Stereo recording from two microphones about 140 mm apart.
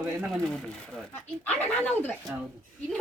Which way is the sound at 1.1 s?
10° left (ahead or behind).